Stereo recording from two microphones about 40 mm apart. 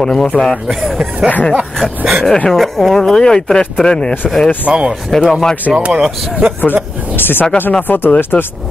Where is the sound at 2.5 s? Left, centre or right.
Centre.